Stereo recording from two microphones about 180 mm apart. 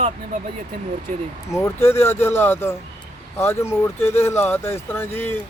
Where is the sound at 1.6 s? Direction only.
15° left (ahead or behind).